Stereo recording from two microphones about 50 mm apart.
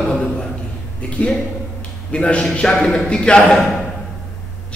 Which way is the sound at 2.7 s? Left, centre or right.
Centre.